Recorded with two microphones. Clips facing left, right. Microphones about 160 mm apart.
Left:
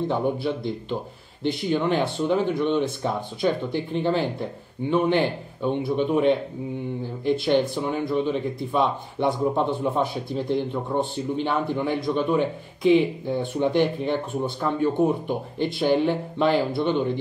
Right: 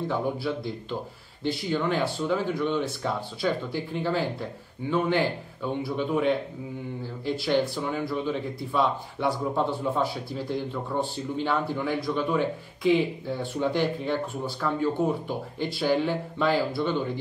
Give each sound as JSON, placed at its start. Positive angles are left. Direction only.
{"t": 0.1, "sound": "speech", "side_deg": 20}